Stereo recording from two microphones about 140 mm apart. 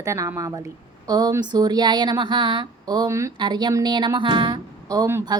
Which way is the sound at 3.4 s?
30° right (ahead or behind).